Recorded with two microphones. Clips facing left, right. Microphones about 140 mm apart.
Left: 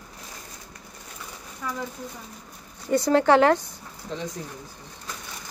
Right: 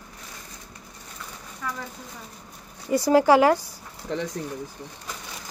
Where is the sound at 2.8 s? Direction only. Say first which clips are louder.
Right 1 dB; 5° right (ahead or behind).